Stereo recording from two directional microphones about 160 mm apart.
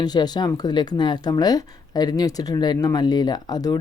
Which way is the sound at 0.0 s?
25° left (ahead or behind).